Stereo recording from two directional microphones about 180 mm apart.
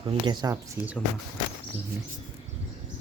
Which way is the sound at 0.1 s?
20° right (ahead or behind).